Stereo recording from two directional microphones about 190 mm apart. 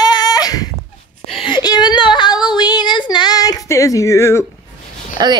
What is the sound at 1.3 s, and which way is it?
Female singing, 25° left (ahead or behind).